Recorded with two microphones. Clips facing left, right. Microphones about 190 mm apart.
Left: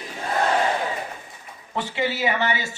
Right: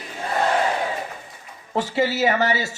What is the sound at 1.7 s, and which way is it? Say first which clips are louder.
Speech: right 4 dB; 40° right (ahead or behind).